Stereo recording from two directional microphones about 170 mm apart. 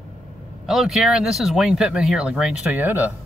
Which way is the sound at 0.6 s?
Centre (ahead or behind).